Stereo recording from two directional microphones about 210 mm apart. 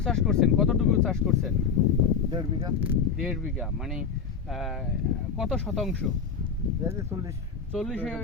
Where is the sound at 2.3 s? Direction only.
20° right (ahead or behind).